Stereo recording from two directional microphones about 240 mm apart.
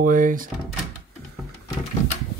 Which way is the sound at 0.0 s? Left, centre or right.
Right.